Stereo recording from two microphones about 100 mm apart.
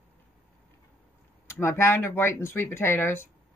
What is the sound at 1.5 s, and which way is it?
Speech, 25° left (ahead or behind).